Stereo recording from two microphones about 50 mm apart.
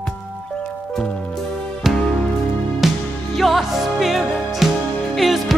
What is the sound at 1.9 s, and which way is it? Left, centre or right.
Music, centre.